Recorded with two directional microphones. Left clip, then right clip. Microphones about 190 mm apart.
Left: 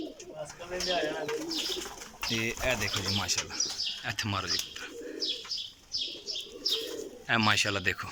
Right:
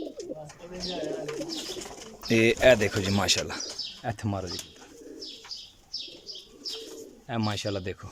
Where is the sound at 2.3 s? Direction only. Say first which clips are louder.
Right 11 dB; 60° right (ahead or behind).